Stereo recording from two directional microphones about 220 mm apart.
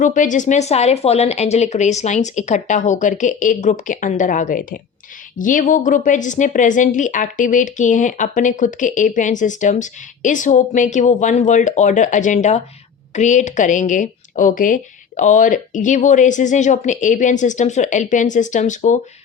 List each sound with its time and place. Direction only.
0.0 s speech: 35° left (ahead or behind)